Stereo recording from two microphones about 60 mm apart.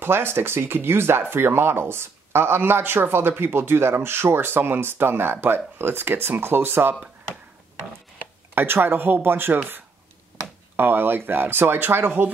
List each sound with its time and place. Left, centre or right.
0.0 s speech: right
8.5 s speech: right
10.8 s speech: right